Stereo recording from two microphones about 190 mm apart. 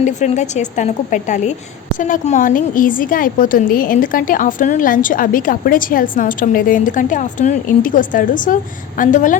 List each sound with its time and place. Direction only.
0.0 s a woman's voice: 40° left (ahead or behind)